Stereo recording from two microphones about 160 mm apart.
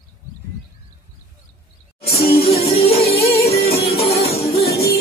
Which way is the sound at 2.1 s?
40° left (ahead or behind).